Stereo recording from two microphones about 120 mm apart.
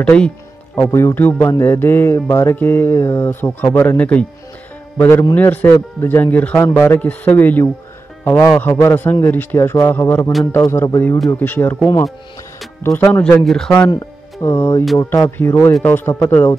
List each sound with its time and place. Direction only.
0.0 s speech: 10° left (ahead or behind)
0.7 s speech: 20° left (ahead or behind)
1.6 s mantra: 20° left (ahead or behind)
4.9 s a man's voice: 20° left (ahead or behind)
8.7 s mantra: 20° left (ahead or behind)
11.3 s speech: 15° left (ahead or behind)
13.4 s speech: 5° left (ahead or behind)
13.7 s speech: 30° left (ahead or behind)
15.0 s mantra: 20° left (ahead or behind)